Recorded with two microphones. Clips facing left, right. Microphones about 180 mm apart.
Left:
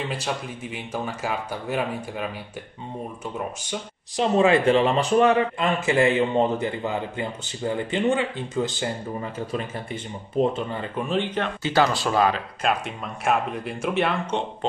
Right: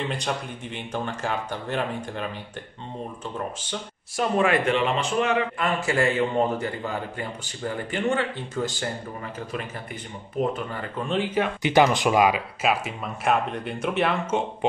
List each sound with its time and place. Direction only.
0.1 s speech: 5° left (ahead or behind)
4.2 s speech: 25° left (ahead or behind)
5.6 s a man's voice: 20° left (ahead or behind)
11.1 s speech: 5° right (ahead or behind)